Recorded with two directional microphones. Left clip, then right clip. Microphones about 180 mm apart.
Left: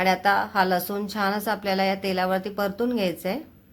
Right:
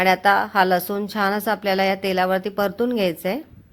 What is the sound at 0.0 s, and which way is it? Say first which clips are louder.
Speech: right 4 dB; 30° right (ahead or behind).